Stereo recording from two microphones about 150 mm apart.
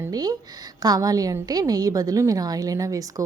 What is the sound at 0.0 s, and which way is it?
Speech, 25° right (ahead or behind).